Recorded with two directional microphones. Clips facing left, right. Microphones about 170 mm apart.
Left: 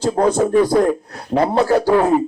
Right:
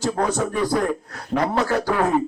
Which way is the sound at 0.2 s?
30° left (ahead or behind).